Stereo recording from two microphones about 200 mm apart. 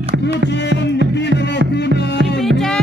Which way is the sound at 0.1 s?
65° right (ahead or behind).